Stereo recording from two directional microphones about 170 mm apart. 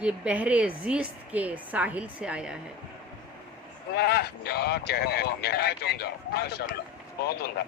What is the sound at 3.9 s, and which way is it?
Speech, 70° left (ahead or behind).